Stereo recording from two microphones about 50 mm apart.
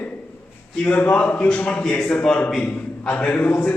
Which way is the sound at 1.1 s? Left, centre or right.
Left.